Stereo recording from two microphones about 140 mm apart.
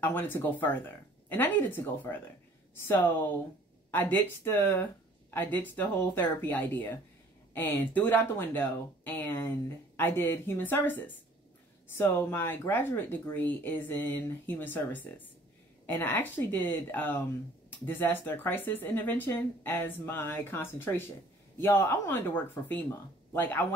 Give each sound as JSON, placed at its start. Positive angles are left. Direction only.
{"t": 0.0, "sound": "speech", "side_deg": 15}
{"t": 3.9, "sound": "speech", "side_deg": 15}